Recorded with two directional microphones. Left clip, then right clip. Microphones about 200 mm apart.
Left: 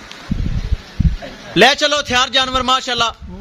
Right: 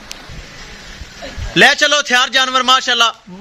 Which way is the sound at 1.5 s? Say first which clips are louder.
Right 2 dB; centre (ahead or behind).